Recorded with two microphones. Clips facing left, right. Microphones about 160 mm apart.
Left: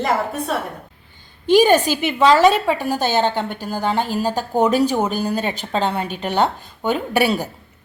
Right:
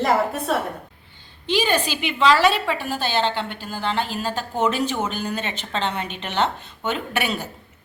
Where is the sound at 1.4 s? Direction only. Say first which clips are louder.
Left 8 dB; 45° left (ahead or behind).